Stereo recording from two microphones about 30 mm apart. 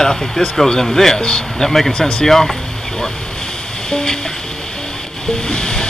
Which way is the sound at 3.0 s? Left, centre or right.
Left.